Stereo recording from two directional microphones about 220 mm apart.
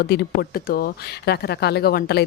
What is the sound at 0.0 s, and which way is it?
Speech, 45° left (ahead or behind).